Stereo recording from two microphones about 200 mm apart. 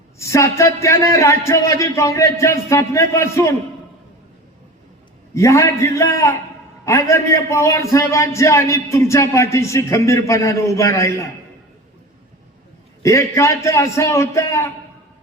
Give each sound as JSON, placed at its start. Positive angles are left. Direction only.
{"t": 0.2, "sound": "a man's voice", "side_deg": 15}
{"t": 5.3, "sound": "a man's voice", "side_deg": 15}
{"t": 13.0, "sound": "a man's voice", "side_deg": 15}